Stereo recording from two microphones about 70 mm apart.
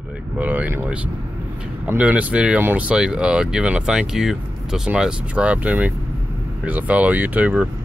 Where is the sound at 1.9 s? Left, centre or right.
Right.